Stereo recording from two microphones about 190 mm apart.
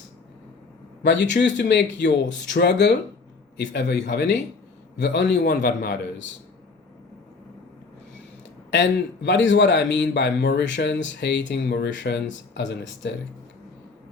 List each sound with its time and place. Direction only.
1.0 s a man's voice: 70° left (ahead or behind)
8.7 s a man's voice: 70° left (ahead or behind)